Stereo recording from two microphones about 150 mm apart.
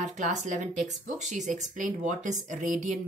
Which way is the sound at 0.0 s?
50° right (ahead or behind).